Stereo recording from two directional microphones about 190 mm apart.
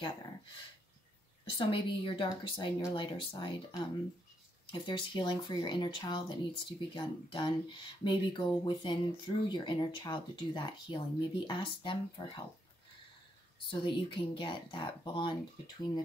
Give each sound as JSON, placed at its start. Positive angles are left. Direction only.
{"t": 1.4, "sound": "speech", "side_deg": 25}
{"t": 13.7, "sound": "speech", "side_deg": 25}